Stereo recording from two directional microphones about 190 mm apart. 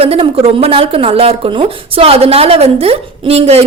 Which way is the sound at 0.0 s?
30° right (ahead or behind).